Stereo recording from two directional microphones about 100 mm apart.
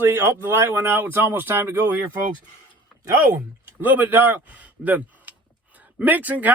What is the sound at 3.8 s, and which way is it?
Speech, 20° right (ahead or behind).